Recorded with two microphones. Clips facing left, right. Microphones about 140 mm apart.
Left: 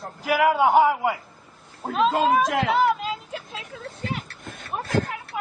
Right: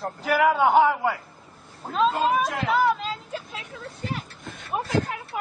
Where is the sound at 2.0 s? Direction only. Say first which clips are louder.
Left 2 dB; 90° left.